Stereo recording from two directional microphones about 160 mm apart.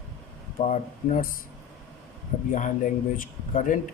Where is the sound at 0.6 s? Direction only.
50° left (ahead or behind).